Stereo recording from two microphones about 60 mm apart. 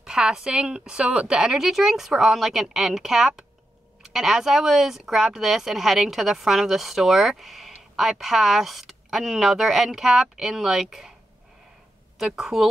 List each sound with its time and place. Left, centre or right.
0.0 s a woman's voice: centre
12.4 s a woman's voice: centre